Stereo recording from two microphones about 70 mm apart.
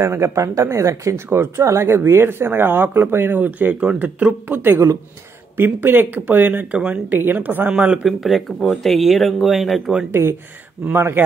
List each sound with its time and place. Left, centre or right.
0.0 s speech: right
7.7 s speech: centre
8.2 s speech: centre
10.2 s speech: right